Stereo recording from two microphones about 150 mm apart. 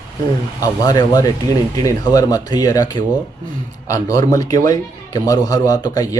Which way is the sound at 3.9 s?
20° left (ahead or behind).